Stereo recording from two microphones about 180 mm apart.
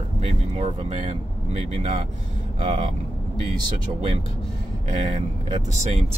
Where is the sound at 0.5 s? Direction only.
35° right (ahead or behind).